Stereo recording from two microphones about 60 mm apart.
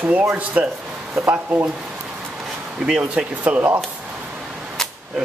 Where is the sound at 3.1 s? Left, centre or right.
Right.